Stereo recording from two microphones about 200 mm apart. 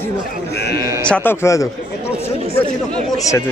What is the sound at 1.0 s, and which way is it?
Speech, 5° left (ahead or behind).